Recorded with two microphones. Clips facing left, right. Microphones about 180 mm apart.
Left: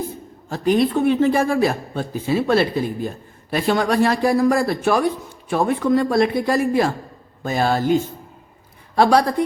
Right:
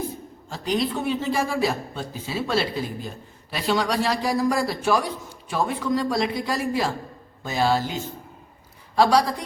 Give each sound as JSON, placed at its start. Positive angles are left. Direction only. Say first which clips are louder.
{"t": 0.5, "sound": "speech", "louder": "left 7 dB", "side_deg": 55}